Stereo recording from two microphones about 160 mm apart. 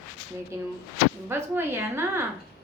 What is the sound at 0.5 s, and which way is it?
Speech, 15° right (ahead or behind).